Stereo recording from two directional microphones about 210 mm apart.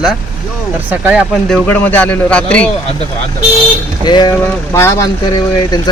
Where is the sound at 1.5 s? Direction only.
10° left (ahead or behind).